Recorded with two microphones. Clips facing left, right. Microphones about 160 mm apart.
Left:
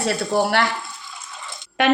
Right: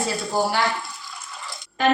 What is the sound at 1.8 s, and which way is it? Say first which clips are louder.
Speech: left 2 dB; 75° left (ahead or behind).